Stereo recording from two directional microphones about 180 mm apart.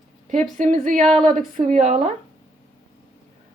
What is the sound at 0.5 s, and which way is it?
Speech, 45° right (ahead or behind).